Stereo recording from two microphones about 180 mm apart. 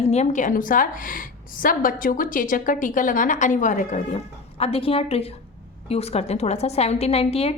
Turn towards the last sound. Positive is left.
turn(degrees=35)  # may be behind; listen again after turning